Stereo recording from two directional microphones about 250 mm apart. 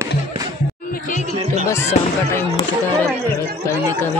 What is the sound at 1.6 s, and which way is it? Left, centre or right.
Speech, centre.